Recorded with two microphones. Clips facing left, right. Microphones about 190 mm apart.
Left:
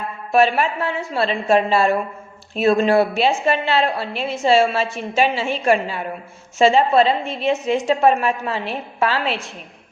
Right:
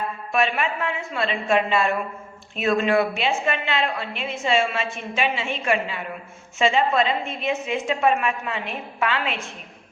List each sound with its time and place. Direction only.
0.3 s a woman's voice: 35° left (ahead or behind)